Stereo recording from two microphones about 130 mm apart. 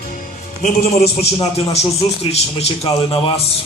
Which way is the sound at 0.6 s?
60° left (ahead or behind).